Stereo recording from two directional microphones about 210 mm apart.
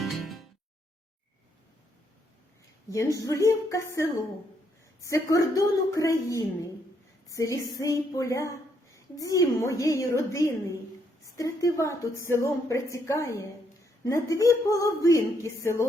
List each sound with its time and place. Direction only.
0.0 s music: centre (ahead or behind)
2.9 s a woman's voice: 15° left (ahead or behind)